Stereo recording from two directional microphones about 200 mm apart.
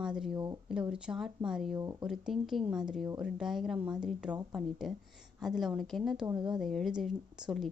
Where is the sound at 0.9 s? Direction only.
5° right (ahead or behind).